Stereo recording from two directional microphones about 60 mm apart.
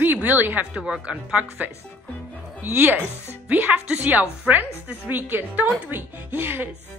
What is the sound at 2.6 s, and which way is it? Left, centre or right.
Speech, right.